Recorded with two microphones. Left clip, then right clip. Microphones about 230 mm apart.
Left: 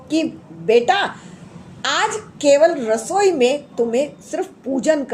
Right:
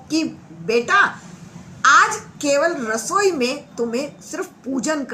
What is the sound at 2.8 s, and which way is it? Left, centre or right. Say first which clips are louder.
Speech: left 4 dB; centre.